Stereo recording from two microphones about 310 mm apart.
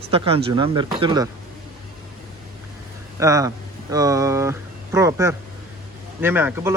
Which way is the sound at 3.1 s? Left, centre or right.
Centre.